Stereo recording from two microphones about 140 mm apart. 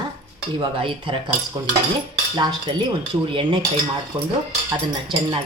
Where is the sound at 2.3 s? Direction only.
30° right (ahead or behind).